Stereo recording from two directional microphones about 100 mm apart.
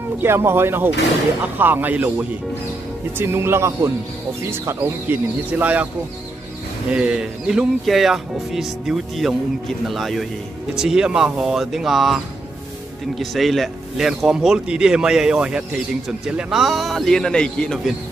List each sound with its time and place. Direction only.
0.2 s speech: 25° right (ahead or behind)
5.5 s speech: 15° right (ahead or behind)
6.9 s speech: 10° right (ahead or behind); by 17.9 s 10° left (ahead or behind)